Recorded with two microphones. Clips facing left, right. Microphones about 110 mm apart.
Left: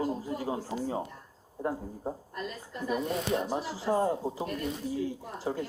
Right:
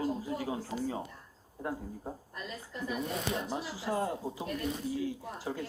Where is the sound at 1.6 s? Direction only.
30° left (ahead or behind).